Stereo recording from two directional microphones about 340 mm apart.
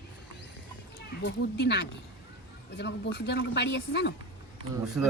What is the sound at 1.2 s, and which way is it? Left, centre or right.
Speech, left.